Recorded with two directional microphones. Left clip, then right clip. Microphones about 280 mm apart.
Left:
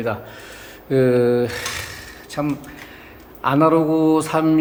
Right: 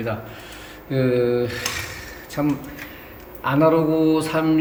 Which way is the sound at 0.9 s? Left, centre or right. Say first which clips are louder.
Left 4 dB; centre.